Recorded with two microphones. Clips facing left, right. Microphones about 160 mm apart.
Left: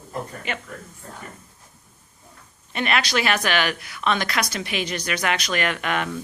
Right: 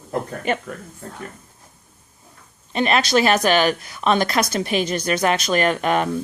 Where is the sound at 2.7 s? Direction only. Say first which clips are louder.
Right 5 dB; 35° right (ahead or behind).